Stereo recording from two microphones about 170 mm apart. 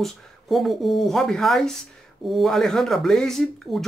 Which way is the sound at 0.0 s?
Centre (ahead or behind).